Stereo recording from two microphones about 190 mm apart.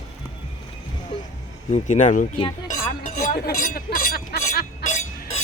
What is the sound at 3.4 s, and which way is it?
Speech, 55° left (ahead or behind).